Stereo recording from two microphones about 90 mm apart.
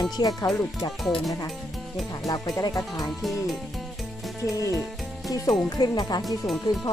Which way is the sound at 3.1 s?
Centre (ahead or behind).